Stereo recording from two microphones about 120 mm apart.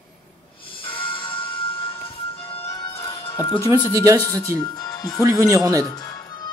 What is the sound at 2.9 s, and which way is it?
Music, 20° left (ahead or behind).